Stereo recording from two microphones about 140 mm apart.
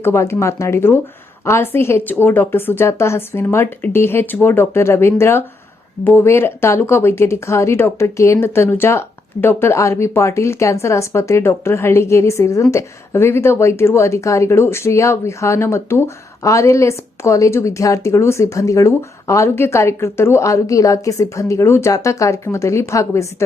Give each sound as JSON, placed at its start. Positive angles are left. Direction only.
{"t": 0.0, "sound": "a woman's voice", "side_deg": 20}